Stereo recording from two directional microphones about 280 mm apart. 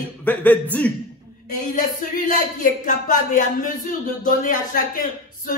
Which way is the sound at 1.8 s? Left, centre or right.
Left.